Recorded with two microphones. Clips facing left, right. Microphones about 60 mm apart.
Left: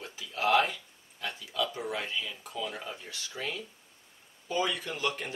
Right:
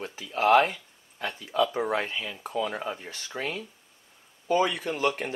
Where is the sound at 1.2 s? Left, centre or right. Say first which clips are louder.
Right 7 dB; right.